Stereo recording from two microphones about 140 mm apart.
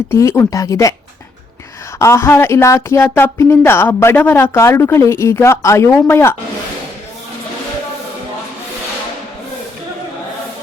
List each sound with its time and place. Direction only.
0.1 s a woman's voice: 20° left (ahead or behind)
2.0 s a woman's voice: 20° left (ahead or behind)